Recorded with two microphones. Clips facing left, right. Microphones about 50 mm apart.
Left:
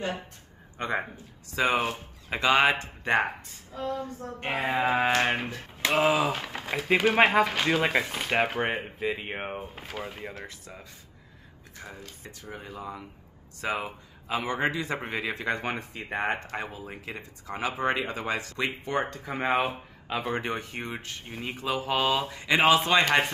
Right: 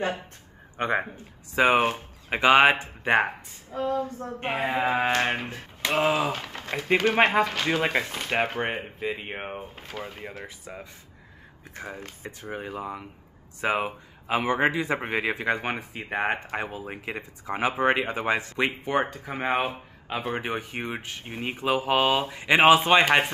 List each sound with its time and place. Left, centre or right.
0.7 s speech: right
4.5 s speech: centre
12.2 s speech: right
16.8 s speech: right